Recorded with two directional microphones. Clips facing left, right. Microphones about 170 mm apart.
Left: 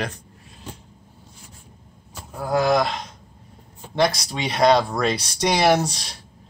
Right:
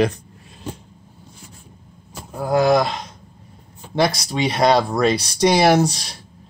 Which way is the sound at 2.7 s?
Centre (ahead or behind).